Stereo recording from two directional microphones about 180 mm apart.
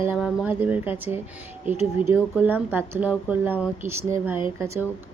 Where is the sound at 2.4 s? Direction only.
10° right (ahead or behind).